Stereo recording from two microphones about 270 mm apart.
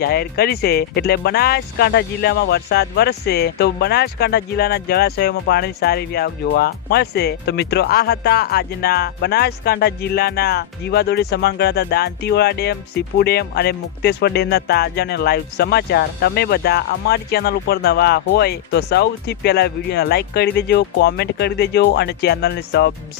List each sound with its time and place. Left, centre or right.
0.0 s speech: left